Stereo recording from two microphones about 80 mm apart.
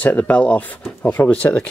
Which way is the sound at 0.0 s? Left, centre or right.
Centre.